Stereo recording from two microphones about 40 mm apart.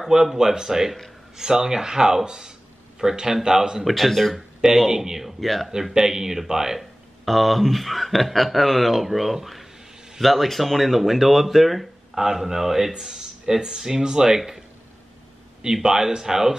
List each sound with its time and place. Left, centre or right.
0.0 s speech: centre
3.8 s speech: centre
4.6 s speech: centre
5.4 s speech: centre
5.9 s speech: centre
6.8 s speech: centre
12.2 s speech: centre
15.6 s speech: centre